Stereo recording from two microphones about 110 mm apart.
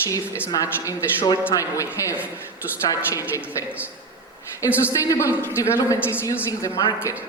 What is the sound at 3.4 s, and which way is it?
Speech, 20° left (ahead or behind).